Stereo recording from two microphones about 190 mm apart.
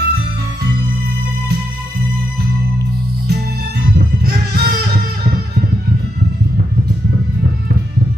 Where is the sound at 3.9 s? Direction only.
60° right (ahead or behind).